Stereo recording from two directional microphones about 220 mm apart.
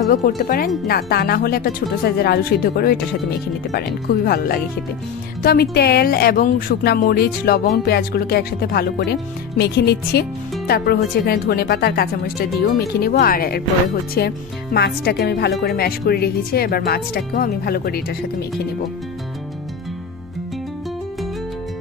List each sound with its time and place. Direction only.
0.4 s speech: 40° left (ahead or behind)